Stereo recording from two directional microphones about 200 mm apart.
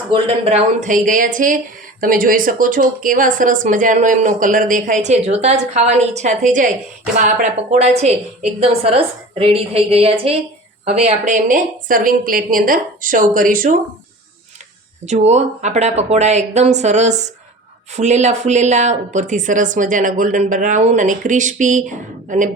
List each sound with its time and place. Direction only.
0.1 s a woman's voice: 30° right (ahead or behind); by 13.7 s 45° right (ahead or behind)
15.0 s speech: 35° right (ahead or behind)